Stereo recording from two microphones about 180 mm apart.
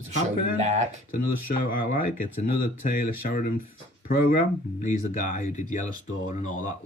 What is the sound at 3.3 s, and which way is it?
Speech, 50° left (ahead or behind).